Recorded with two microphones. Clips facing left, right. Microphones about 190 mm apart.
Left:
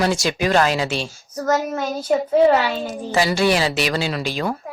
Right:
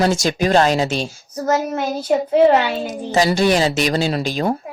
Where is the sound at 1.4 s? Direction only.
20° right (ahead or behind).